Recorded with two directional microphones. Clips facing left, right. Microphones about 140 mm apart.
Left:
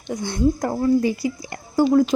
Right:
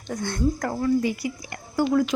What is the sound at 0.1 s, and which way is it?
Speech, 15° left (ahead or behind).